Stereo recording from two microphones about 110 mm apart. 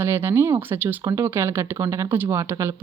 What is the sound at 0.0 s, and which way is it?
Speech, 20° right (ahead or behind).